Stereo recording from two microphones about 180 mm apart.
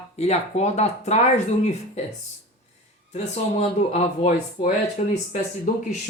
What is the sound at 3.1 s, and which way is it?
Speech, 35° left (ahead or behind).